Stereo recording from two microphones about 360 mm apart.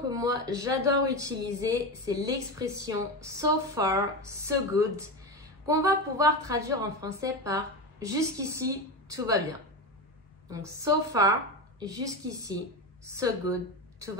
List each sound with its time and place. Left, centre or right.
0.1 s speech: centre
10.5 s a woman's voice: centre